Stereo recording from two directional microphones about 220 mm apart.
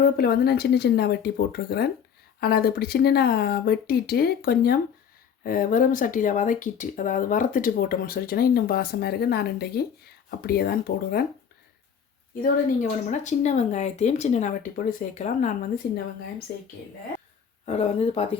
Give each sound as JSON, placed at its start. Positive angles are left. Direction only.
{"t": 0.2, "sound": "speech", "side_deg": 45}
{"t": 12.4, "sound": "speech", "side_deg": 35}
{"t": 16.5, "sound": "speech", "side_deg": 45}
{"t": 17.7, "sound": "speech", "side_deg": 30}